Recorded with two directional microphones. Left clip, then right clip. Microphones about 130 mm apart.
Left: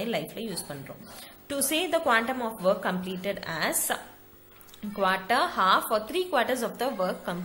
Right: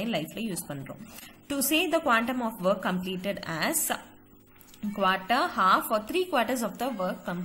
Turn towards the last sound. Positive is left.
turn(degrees=-20)  # may be behind; listen again after turning